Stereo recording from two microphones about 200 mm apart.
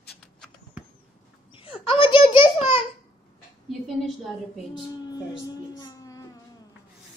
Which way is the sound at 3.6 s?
Centre (ahead or behind).